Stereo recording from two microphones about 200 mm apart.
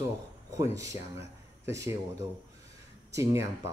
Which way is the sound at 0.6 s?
15° right (ahead or behind).